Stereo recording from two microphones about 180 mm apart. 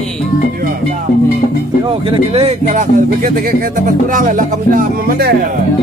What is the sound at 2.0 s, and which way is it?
Speech, 30° right (ahead or behind).